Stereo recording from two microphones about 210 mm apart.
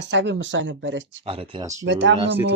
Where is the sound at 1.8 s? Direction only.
60° right (ahead or behind).